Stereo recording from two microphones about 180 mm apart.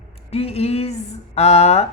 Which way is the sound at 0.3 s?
35° left (ahead or behind).